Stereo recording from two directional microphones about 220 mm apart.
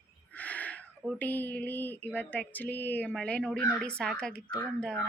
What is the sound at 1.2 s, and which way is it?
A woman's voice, 5° left (ahead or behind).